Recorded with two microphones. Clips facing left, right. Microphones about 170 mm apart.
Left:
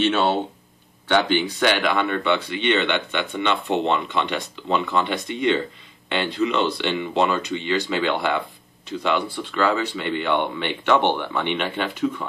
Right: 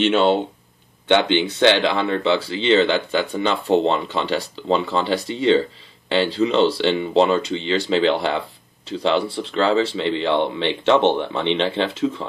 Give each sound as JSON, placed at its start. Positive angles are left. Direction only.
{"t": 1.0, "sound": "speech", "side_deg": -20}